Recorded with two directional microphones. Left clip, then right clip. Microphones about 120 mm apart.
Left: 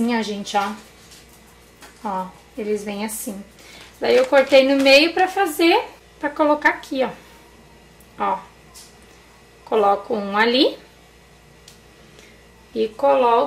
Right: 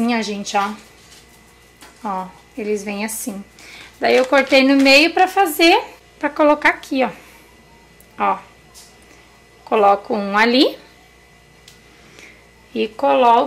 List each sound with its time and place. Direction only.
0.0 s a woman's voice: 30° right (ahead or behind)
2.0 s a woman's voice: 30° right (ahead or behind)
8.2 s speech: 25° right (ahead or behind)
9.7 s a woman's voice: 30° right (ahead or behind)
12.7 s speech: 25° right (ahead or behind)